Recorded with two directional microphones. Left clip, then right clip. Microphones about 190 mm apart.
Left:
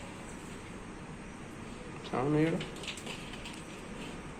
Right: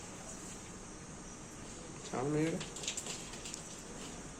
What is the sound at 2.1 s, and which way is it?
Speech, 10° right (ahead or behind).